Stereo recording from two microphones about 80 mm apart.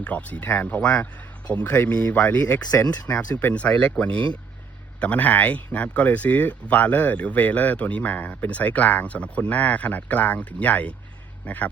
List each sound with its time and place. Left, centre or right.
0.0 s speech: centre
2.6 s speech: left
3.3 s speech: centre